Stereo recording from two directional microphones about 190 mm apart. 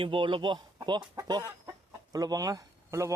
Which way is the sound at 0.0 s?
25° right (ahead or behind).